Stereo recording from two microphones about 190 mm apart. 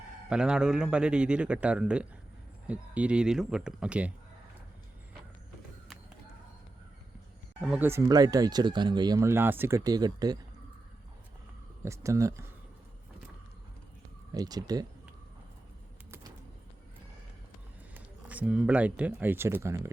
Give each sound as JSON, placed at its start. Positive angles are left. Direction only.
{"t": 0.3, "sound": "a man's voice", "side_deg": -5}
{"t": 7.6, "sound": "speech", "side_deg": -10}
{"t": 11.9, "sound": "speech", "side_deg": -15}
{"t": 14.3, "sound": "speech", "side_deg": -20}
{"t": 17.9, "sound": "speech", "side_deg": -10}